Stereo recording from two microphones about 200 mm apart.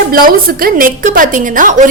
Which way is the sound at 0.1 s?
45° right (ahead or behind).